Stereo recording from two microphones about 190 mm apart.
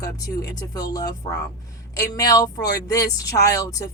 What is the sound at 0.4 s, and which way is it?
A woman's voice, 20° left (ahead or behind).